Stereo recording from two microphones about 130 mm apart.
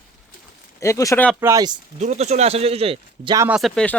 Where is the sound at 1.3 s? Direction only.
20° right (ahead or behind).